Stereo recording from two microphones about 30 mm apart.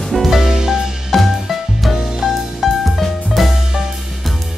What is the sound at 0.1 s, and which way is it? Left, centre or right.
Music, centre.